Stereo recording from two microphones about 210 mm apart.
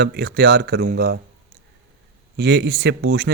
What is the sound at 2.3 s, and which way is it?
Speech, 55° right (ahead or behind).